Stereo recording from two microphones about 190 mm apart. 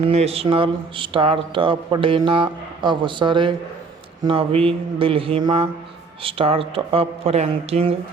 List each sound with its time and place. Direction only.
0.1 s a man's voice: 30° right (ahead or behind)